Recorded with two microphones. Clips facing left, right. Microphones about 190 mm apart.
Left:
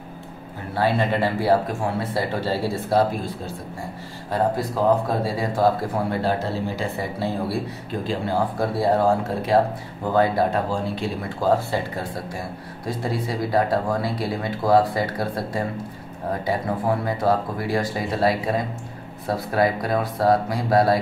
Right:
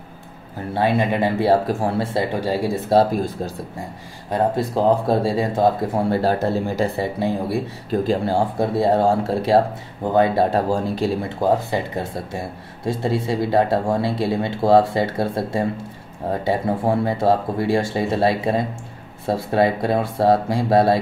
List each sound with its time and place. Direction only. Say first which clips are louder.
0.7 s speech: right 2 dB; 15° right (ahead or behind)
1.5 s speech: right 3 dB; 30° right (ahead or behind)
2.4 s speech: right 3 dB; 15° right (ahead or behind)
2.9 s speech: right 4 dB; 30° right (ahead or behind)
6.1 s speech: right 4 dB; 45° right (ahead or behind)
7.0 s speech: right 4 dB; 20° right (ahead or behind)
7.9 s speech: right 6 dB; 40° right (ahead or behind)
8.4 s speech: right 3 dB; 25° right (ahead or behind)
10.5 s speech: right 4 dB; 40° right (ahead or behind)
11.2 s speech: right 2 dB; 20° right (ahead or behind)